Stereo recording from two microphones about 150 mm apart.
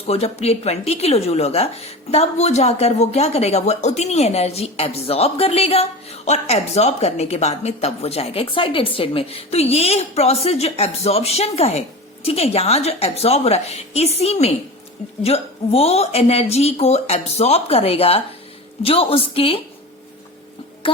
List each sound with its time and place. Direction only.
0.1 s a woman's voice: 45° left (ahead or behind)